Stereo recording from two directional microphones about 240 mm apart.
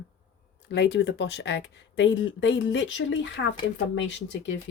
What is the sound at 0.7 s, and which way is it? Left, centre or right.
Speech, left.